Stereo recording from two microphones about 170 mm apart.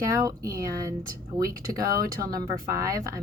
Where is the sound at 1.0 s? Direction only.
55° right (ahead or behind).